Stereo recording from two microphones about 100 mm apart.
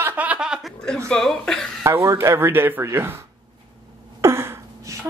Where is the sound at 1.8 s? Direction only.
30° right (ahead or behind).